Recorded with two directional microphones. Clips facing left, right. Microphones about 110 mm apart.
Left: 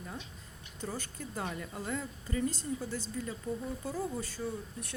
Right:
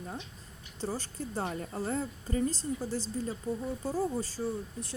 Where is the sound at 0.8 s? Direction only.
35° right (ahead or behind).